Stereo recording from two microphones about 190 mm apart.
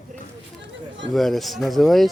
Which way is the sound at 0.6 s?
70° right (ahead or behind).